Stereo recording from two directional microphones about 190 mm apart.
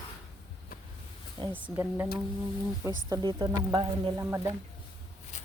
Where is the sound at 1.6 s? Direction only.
10° right (ahead or behind).